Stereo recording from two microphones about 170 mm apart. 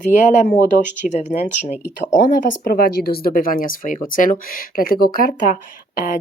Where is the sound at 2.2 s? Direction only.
55° left (ahead or behind).